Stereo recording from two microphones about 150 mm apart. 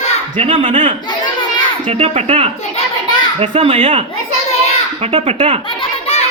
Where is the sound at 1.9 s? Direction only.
45° right (ahead or behind).